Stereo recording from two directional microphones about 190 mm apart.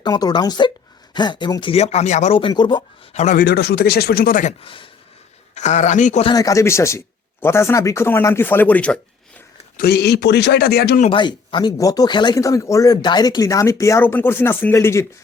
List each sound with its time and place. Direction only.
0.0 s speech: 20° left (ahead or behind)
1.7 s a man's voice: 35° left (ahead or behind)
3.2 s a man's voice: 40° left (ahead or behind)
3.4 s speech: 60° left (ahead or behind)
4.6 s speech: 25° left (ahead or behind)
5.5 s a man's voice: 40° left (ahead or behind)
6.2 s speech: 20° left (ahead or behind)
9.7 s speech: 55° left (ahead or behind)
11.0 s speech: 25° left (ahead or behind)